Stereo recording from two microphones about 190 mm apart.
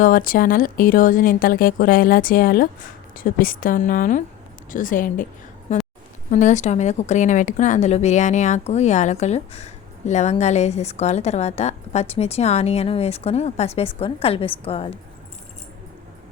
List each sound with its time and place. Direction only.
0.0 s speech: 45° left (ahead or behind)
6.3 s a woman's voice: 40° left (ahead or behind)